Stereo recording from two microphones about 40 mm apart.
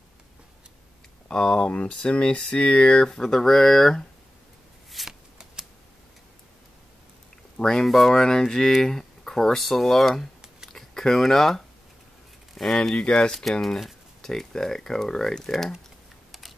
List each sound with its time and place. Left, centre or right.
1.3 s speech: centre
5.0 s shuffling cards: centre
7.5 s speech: centre
10.7 s a sound: centre
12.6 s speech: centre
13.0 s speech: left
13.3 s speech: centre
16.3 s computer keyboard: centre